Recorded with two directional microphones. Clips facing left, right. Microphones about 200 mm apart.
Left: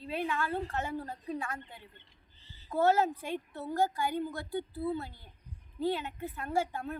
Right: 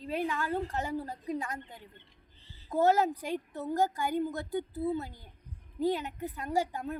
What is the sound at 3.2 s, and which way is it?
A woman's voice, 40° right (ahead or behind).